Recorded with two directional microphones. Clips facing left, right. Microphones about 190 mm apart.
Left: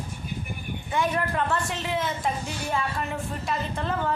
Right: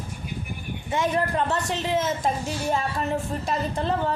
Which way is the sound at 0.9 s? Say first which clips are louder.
Right 2 dB; 25° right (ahead or behind).